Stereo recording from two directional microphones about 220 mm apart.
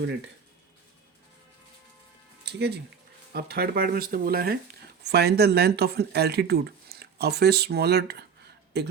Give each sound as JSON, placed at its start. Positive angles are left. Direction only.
{"t": 2.4, "sound": "speech", "side_deg": -50}